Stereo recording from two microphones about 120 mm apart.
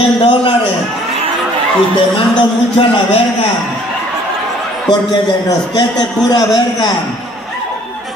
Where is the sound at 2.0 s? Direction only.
45° left (ahead or behind).